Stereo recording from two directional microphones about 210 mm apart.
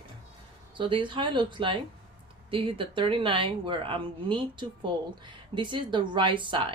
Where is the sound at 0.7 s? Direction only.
25° right (ahead or behind).